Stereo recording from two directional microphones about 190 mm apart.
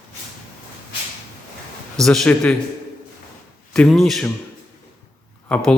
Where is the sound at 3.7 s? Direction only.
5° left (ahead or behind).